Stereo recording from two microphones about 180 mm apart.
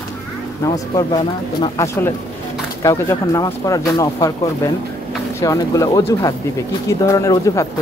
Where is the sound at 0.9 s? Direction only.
20° left (ahead or behind).